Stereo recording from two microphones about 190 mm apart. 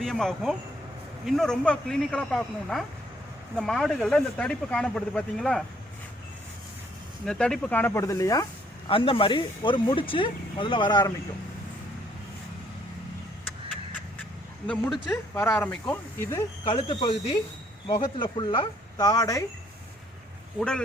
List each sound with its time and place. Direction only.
0.0 s speech: 5° left (ahead or behind)
7.3 s speech: 5° left (ahead or behind)
8.9 s speech: 30° left (ahead or behind)
15.1 s speech: 15° left (ahead or behind)
16.6 s speech: 25° left (ahead or behind)
20.6 s speech: 5° left (ahead or behind)